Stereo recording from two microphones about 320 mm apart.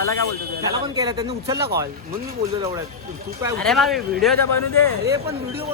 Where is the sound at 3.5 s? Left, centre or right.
Centre.